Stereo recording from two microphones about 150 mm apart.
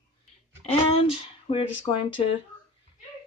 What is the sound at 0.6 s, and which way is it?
Speech, 45° left (ahead or behind).